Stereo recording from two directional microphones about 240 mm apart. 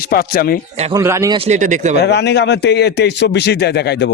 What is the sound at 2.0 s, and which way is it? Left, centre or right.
A man's voice, left.